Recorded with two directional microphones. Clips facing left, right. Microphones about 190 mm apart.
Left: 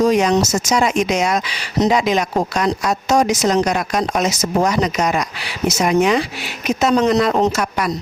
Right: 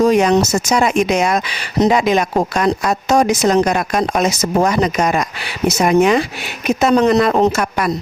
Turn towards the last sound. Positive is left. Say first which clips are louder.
# right 2 dB
turn(degrees=-55)  # may be behind; listen again after turning